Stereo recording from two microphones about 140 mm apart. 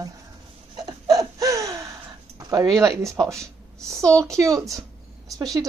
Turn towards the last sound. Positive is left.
turn(degrees=-25)  # may be behind; listen again after turning